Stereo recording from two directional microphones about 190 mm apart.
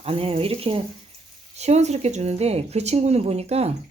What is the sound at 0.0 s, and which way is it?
A woman's voice, 30° right (ahead or behind).